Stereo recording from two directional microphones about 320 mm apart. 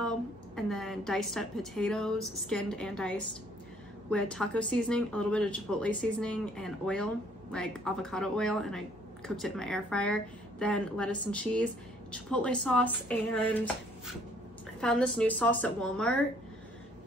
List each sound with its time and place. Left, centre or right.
0.6 s a woman's voice: centre
14.8 s a woman's voice: centre